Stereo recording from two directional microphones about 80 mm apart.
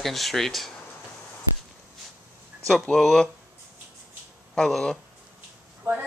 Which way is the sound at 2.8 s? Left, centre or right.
Centre.